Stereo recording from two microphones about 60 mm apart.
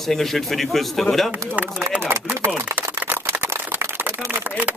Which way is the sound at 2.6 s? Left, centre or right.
Right.